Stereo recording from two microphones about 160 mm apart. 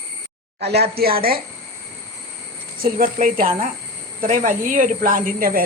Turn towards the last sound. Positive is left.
turn(degrees=-60)  # may be behind; listen again after turning